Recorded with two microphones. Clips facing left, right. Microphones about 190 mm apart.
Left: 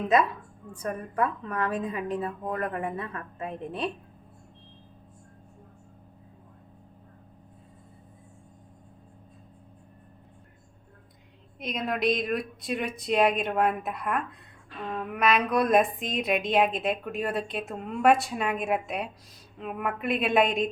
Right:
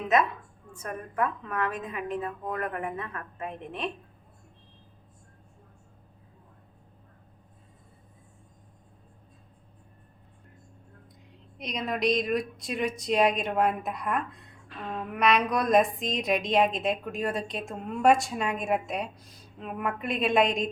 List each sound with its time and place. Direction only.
0.7 s a woman's voice: 35° left (ahead or behind)
11.6 s a woman's voice: centre (ahead or behind)